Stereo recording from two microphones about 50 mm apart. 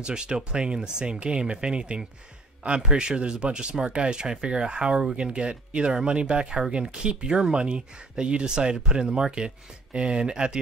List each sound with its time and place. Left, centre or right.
0.0 s speech: centre